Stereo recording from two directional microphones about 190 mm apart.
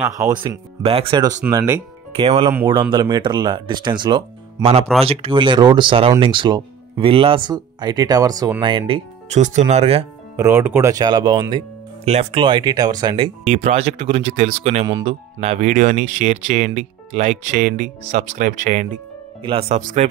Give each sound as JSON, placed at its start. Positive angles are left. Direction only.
{"t": 0.4, "sound": "speech", "side_deg": -25}
{"t": 10.3, "sound": "speech", "side_deg": -15}
{"t": 12.0, "sound": "speech", "side_deg": -35}
{"t": 14.9, "sound": "speech", "side_deg": -20}
{"t": 15.4, "sound": "speech", "side_deg": -35}
{"t": 19.4, "sound": "speech", "side_deg": -30}
{"t": 19.8, "sound": "a man's voice", "side_deg": -45}